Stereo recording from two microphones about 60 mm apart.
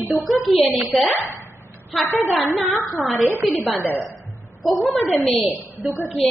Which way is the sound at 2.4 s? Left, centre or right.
Centre.